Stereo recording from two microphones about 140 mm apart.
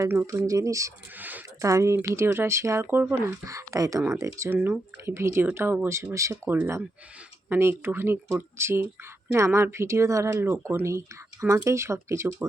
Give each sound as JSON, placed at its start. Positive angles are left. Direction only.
{"t": 0.0, "sound": "speech", "side_deg": -20}